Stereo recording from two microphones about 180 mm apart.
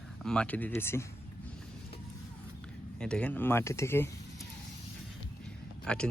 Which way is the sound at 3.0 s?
5° left (ahead or behind).